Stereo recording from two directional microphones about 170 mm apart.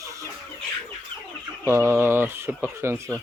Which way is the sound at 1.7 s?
15° right (ahead or behind).